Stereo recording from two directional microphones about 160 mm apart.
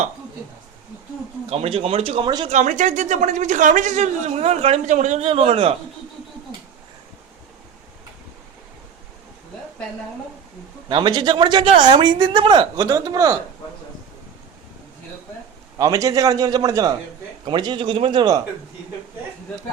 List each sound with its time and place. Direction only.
1.5 s speech: 40° right (ahead or behind)
2.5 s a man's voice: 50° right (ahead or behind)
10.8 s speech: 30° right (ahead or behind)
15.8 s speech: 20° right (ahead or behind)